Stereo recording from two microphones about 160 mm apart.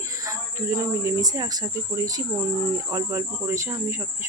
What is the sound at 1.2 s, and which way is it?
Cricket, 25° right (ahead or behind).